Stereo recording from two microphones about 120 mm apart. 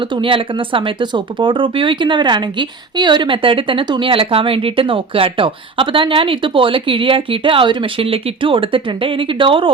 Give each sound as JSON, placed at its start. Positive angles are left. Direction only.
{"t": 0.2, "sound": "speech", "side_deg": -45}